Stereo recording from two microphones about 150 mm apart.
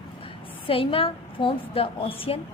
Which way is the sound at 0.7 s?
35° left (ahead or behind).